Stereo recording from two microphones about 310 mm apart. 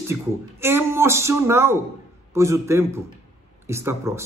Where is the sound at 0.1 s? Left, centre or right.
Centre.